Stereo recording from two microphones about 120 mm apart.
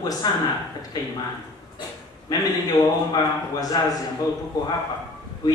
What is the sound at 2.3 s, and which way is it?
A man's voice, 35° left (ahead or behind).